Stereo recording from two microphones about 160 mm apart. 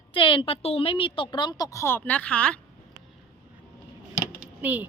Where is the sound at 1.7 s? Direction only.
15° left (ahead or behind).